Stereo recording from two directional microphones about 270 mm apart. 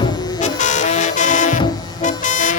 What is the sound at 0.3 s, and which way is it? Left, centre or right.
Music, left.